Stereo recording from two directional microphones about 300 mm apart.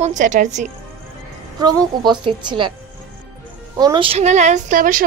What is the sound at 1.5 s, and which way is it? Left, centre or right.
Speech, centre.